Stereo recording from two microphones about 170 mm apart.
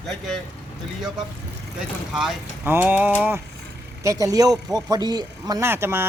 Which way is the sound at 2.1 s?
5° right (ahead or behind).